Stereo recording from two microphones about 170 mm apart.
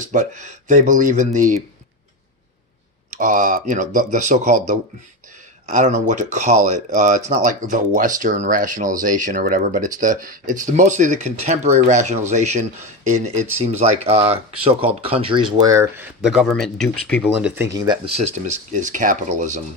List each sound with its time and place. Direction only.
0.0 s speech: 50° right (ahead or behind)
3.2 s speech: 50° right (ahead or behind); by 16.1 s 15° right (ahead or behind)
16.2 s speech: centre (ahead or behind)
17.5 s speech: 15° right (ahead or behind)
18.1 s speech: 40° right (ahead or behind)